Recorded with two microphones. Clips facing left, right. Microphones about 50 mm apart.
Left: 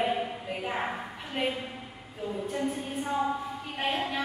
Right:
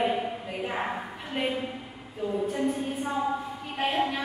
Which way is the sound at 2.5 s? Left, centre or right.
Centre.